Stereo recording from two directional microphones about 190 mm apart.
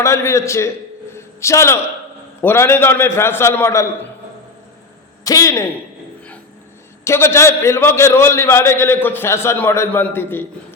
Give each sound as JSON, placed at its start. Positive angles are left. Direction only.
{"t": 0.0, "sound": "a man's voice", "side_deg": 15}
{"t": 1.1, "sound": "a sound", "side_deg": 15}
{"t": 2.4, "sound": "a man's voice", "side_deg": 10}
{"t": 5.2, "sound": "a man's voice", "side_deg": 20}
{"t": 7.0, "sound": "a man's voice", "side_deg": 15}